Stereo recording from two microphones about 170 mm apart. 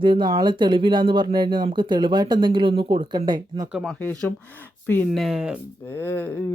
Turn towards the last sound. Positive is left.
turn(degrees=10)  # may be behind; listen again after turning